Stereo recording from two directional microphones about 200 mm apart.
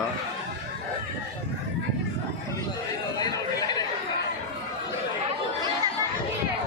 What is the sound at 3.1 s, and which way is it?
Chatter, 20° left (ahead or behind).